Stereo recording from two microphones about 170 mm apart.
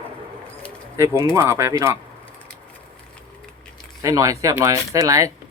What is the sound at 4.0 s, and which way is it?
Speech, 20° right (ahead or behind).